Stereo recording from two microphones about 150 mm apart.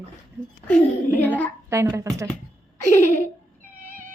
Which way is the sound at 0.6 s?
10° left (ahead or behind).